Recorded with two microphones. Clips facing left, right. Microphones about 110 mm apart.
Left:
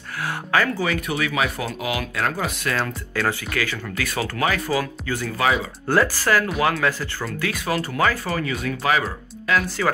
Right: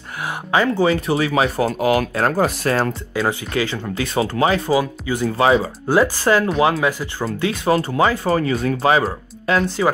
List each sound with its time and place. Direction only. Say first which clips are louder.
0.2 s speech: right 3 dB; 20° right (ahead or behind); by 2.9 s 40° right (ahead or behind)
3.2 s speech: right 3 dB; 20° right (ahead or behind)
5.9 s speech: right 3 dB; 15° right (ahead or behind)
9.7 s speech: right 4 dB; 20° right (ahead or behind)